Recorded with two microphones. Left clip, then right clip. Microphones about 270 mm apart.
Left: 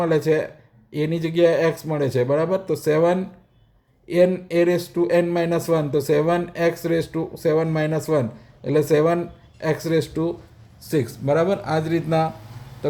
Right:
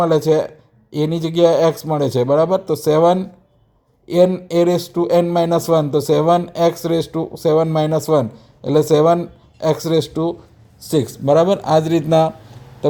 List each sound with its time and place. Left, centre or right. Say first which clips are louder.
0.0 s speech: right 5 dB; centre
12.8 s owl: right 7 dB; right